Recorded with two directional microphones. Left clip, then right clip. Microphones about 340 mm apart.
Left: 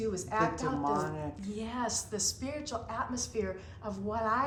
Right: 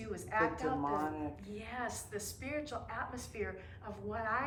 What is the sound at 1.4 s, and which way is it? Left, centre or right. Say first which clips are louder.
A woman's voice: left 5 dB; centre.